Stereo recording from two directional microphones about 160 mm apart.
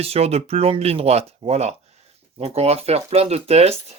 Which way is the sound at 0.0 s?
40° right (ahead or behind).